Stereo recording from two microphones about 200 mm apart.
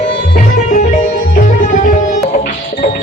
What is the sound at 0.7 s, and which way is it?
Music, 35° left (ahead or behind).